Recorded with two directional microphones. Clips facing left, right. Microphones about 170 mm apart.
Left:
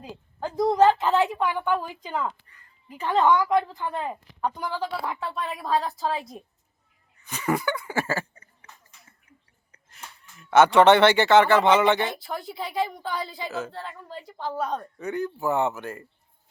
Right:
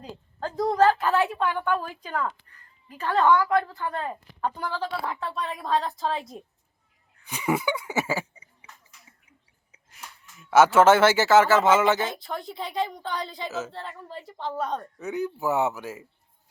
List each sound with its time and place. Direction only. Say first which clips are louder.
0.0 s a woman's voice: left 1 dB; 15° left (ahead or behind)
7.3 s a sound: even; 10° right (ahead or behind)
9.7 s wheeze: left 1 dB; 5° right (ahead or behind)
10.3 s speech: left 1 dB; centre (ahead or behind)